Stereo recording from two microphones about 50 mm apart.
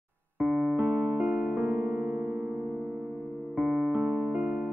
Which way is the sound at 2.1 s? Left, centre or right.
Right.